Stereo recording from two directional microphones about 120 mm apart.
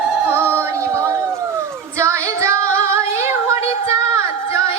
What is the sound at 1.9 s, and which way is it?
Female singing, 25° right (ahead or behind).